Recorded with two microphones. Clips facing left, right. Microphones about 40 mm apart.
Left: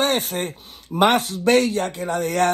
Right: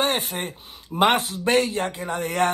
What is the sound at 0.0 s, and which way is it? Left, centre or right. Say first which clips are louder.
Speech: left 3 dB; right.